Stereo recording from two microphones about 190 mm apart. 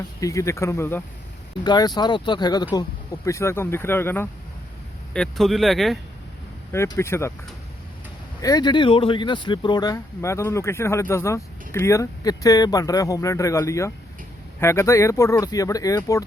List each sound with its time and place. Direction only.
0.2 s speech: 15° left (ahead or behind)
5.1 s speech: centre (ahead or behind)
6.7 s speech: 15° left (ahead or behind)
8.4 s speech: 20° left (ahead or behind)